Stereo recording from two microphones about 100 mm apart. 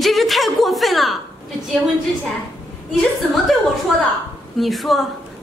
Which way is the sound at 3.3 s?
Centre (ahead or behind).